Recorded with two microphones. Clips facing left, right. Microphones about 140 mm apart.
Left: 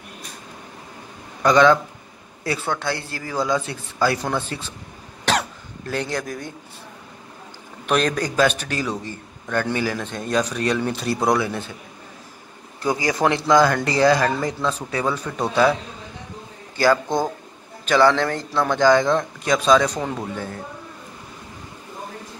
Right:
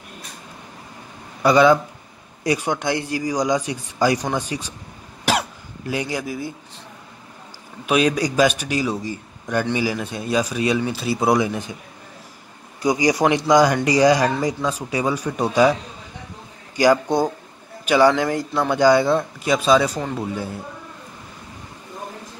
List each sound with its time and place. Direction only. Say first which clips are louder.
1.4 s a man's voice: right 1 dB; 10° right (ahead or behind)
5.2 s cough: right 1 dB; 10° right (ahead or behind)
7.8 s a man's voice: right 2 dB; 10° right (ahead or behind)
11.3 s a man's voice: right 2 dB; 15° right (ahead or behind)
12.8 s a man's voice: right 3 dB; 15° right (ahead or behind)
16.7 s a man's voice: right 2 dB; 15° right (ahead or behind)